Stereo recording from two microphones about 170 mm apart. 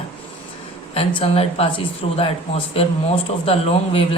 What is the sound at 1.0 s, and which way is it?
Speech, 35° left (ahead or behind).